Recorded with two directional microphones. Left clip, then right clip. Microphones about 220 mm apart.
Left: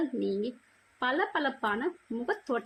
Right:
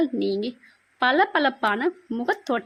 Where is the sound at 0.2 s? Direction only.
40° right (ahead or behind).